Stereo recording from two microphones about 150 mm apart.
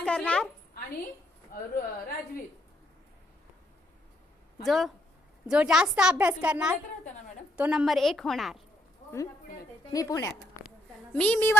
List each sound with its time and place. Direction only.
0.0 s a woman's voice: 5° left (ahead or behind)
1.7 s a woman's voice: 70° left (ahead or behind)
4.6 s a woman's voice: centre (ahead or behind)
9.9 s speech: 25° left (ahead or behind)
11.1 s a woman's voice: 10° left (ahead or behind)